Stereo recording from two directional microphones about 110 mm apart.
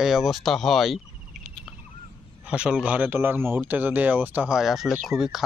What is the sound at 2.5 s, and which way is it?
Speech, 10° right (ahead or behind).